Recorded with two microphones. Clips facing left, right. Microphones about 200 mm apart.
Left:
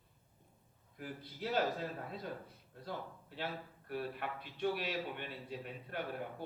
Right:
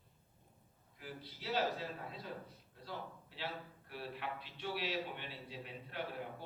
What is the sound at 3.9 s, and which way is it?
A man's voice, 50° left (ahead or behind).